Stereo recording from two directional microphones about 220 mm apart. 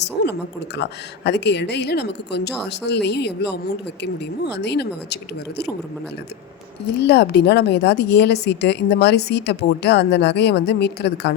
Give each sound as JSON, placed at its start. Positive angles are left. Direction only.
{"t": 0.0, "sound": "a sound", "side_deg": 50}
{"t": 0.8, "sound": "a woman's voice", "side_deg": 50}
{"t": 6.8, "sound": "a woman's voice", "side_deg": 50}